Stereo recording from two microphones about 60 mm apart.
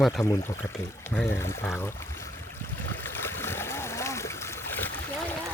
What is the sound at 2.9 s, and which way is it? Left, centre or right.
Stream, left.